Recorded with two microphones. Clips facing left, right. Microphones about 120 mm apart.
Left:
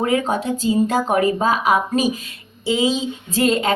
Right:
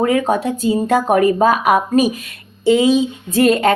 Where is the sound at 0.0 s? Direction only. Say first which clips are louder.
Right 4 dB; 50° right (ahead or behind).